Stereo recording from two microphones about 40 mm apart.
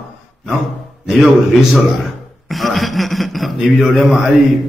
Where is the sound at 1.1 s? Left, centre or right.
Centre.